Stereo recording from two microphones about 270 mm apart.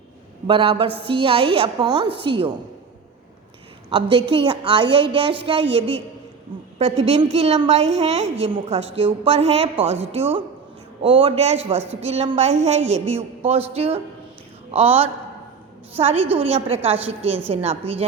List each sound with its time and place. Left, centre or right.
0.4 s a woman's voice: centre
3.8 s a woman's voice: centre
11.8 s a woman's voice: centre
12.0 s a woman's voice: right